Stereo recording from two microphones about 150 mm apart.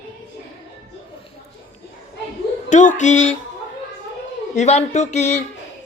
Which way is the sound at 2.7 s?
55° left (ahead or behind).